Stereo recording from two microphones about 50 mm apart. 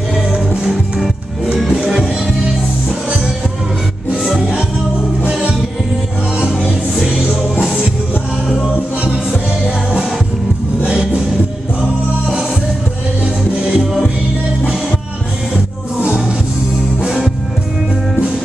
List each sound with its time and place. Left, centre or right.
1.6 s music: centre
5.3 s music: centre
10.9 s music: centre
13.7 s music: centre
15.5 s music: centre